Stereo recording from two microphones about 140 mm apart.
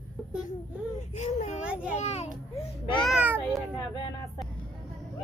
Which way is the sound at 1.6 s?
10° right (ahead or behind).